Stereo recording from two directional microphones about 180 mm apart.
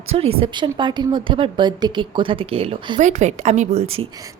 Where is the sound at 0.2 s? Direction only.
30° right (ahead or behind).